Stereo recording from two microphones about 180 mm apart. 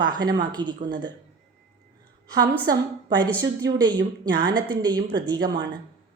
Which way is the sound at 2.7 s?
20° right (ahead or behind).